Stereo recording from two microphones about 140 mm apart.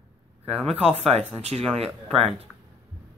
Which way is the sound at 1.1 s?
50° right (ahead or behind).